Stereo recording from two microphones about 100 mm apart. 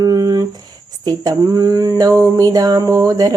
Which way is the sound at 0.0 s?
35° right (ahead or behind).